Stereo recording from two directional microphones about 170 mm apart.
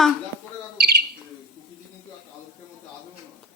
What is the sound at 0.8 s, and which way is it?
Speech, 65° right (ahead or behind).